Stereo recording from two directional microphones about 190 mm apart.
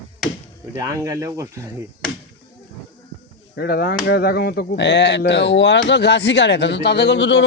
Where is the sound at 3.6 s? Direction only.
55° left (ahead or behind).